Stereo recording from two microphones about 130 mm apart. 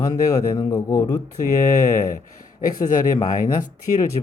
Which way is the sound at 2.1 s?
90° left.